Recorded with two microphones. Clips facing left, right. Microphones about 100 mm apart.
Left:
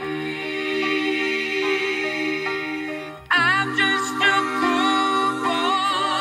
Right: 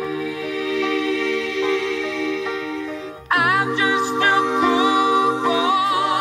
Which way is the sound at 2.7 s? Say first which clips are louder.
Right 1 dB; 30° right (ahead or behind).